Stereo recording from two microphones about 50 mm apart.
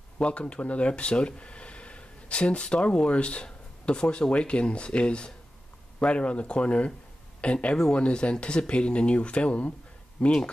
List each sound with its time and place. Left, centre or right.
0.2 s speech: left